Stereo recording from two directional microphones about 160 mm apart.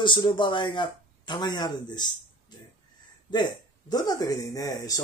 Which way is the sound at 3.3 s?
25° left (ahead or behind).